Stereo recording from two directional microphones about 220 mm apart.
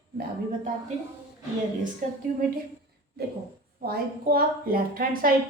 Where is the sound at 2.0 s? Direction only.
35° right (ahead or behind).